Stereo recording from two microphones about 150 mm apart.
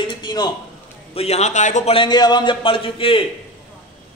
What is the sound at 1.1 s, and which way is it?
Speech, 45° left (ahead or behind).